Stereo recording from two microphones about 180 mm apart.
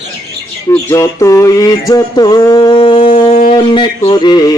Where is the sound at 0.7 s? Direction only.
15° left (ahead or behind).